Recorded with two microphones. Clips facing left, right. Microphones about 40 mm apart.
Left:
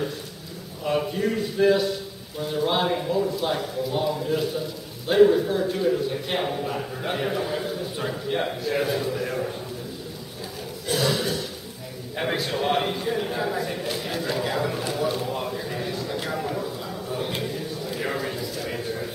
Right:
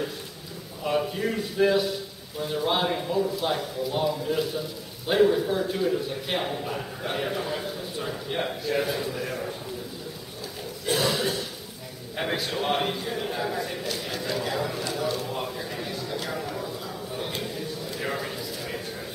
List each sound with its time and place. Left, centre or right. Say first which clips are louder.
0.8 s a man's voice: left 2 dB; centre
10.9 s throat clearing: even; right
12.2 s a man's voice: left 2 dB; centre
13.8 s a sound: left 3 dB; centre